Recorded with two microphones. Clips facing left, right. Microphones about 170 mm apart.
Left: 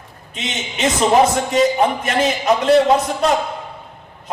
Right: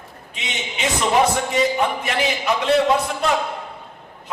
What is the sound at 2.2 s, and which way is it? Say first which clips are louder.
A man's voice: left 6 dB; 40° left (ahead or behind).